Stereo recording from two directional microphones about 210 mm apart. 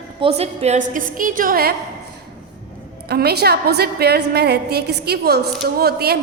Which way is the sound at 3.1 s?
50° right (ahead or behind).